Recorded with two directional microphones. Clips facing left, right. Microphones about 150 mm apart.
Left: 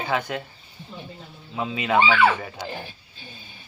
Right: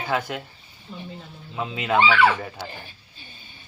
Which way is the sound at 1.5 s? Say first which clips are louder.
Left 1 dB; 10° left (ahead or behind).